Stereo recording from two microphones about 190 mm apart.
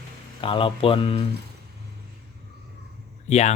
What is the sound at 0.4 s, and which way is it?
Speech, 25° left (ahead or behind).